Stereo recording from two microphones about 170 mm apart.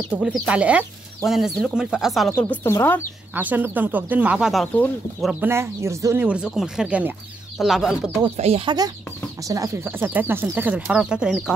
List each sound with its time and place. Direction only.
0.1 s speech: 5° right (ahead or behind)
2.5 s speech: 15° left (ahead or behind)
3.3 s speech: 10° right (ahead or behind)
8.4 s speech: 35° right (ahead or behind)
9.4 s speech: 20° right (ahead or behind); by 11.5 s 5° right (ahead or behind)